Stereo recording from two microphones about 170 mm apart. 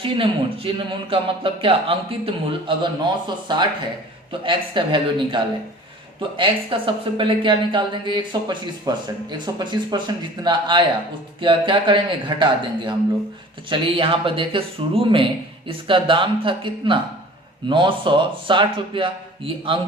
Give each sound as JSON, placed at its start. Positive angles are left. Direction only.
{"t": 0.0, "sound": "speech", "side_deg": -30}